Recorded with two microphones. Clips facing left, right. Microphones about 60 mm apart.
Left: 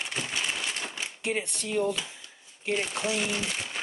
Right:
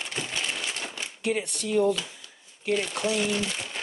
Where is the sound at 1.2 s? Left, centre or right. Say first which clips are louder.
Right 3 dB; left.